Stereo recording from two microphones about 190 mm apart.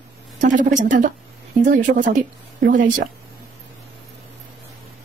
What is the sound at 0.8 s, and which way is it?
Speech, 45° right (ahead or behind).